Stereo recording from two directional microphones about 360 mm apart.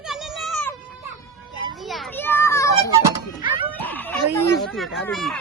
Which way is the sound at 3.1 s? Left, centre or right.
Centre.